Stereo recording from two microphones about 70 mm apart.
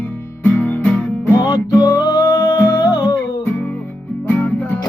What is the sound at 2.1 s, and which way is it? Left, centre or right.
Music, left.